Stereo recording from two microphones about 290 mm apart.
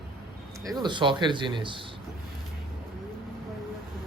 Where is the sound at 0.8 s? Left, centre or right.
Centre.